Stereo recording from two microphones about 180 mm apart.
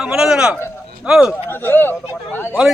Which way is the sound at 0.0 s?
5° right (ahead or behind).